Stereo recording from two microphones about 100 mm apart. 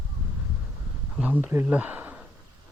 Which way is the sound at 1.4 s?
20° right (ahead or behind).